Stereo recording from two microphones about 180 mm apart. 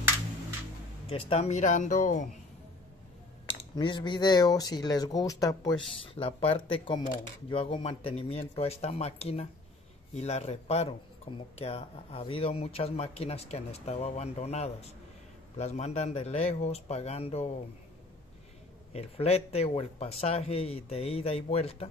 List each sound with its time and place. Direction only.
1.1 s speech: 35° left (ahead or behind)
3.4 s speech: 30° left (ahead or behind)
5.8 s speech: 30° left (ahead or behind)
18.9 s speech: 35° left (ahead or behind)